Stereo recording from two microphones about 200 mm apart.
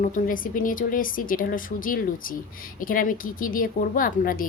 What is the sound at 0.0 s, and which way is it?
Speech, 40° left (ahead or behind).